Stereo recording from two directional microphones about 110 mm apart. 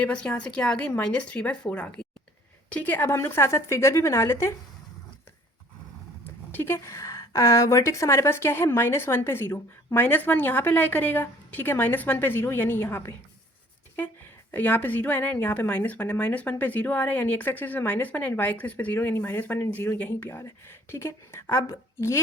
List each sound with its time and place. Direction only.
0.0 s a woman's voice: 10° left (ahead or behind)
6.6 s a woman's voice: 25° left (ahead or behind)
14.5 s a woman's voice: 15° left (ahead or behind)